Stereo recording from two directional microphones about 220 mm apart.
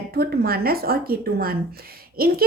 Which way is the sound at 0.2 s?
45° right (ahead or behind).